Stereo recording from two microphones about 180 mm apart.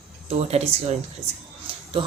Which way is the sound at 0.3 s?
35° right (ahead or behind).